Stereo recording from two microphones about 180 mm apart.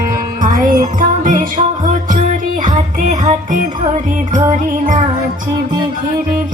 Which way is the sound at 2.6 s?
45° right (ahead or behind).